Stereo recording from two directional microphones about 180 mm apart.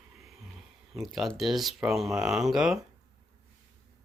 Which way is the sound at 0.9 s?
Centre (ahead or behind).